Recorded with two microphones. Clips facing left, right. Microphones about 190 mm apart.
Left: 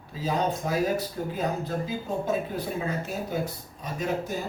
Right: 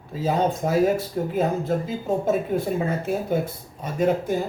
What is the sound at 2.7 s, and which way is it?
Speech, 55° right (ahead or behind).